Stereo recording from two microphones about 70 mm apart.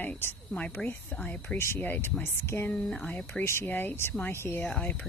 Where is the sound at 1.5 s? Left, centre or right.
Left.